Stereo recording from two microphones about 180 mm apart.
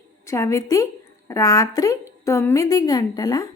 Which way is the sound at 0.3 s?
15° left (ahead or behind).